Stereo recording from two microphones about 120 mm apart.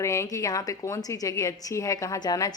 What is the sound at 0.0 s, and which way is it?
A woman's voice, 25° left (ahead or behind).